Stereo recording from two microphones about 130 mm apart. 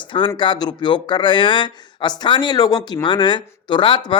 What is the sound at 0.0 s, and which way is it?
Speech, 40° left (ahead or behind).